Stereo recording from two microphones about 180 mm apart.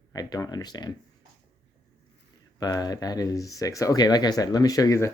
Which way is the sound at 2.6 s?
20° left (ahead or behind).